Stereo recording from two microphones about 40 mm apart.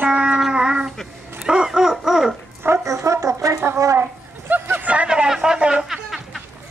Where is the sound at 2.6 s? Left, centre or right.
Right.